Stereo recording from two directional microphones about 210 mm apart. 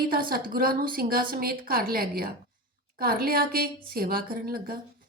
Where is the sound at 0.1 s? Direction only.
45° right (ahead or behind).